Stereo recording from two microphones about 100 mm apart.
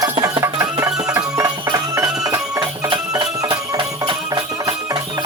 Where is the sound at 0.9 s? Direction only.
5° right (ahead or behind).